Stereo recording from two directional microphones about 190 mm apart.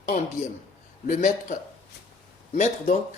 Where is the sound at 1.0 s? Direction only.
45° left (ahead or behind).